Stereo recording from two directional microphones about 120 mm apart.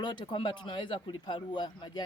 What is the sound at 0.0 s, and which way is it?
Speech, 40° left (ahead or behind).